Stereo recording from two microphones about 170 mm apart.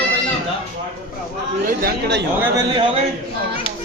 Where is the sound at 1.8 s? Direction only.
70° right (ahead or behind).